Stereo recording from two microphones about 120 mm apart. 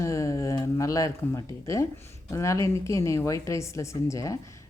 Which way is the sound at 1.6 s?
25° left (ahead or behind).